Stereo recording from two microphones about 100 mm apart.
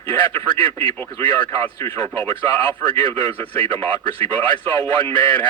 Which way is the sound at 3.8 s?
20° left (ahead or behind).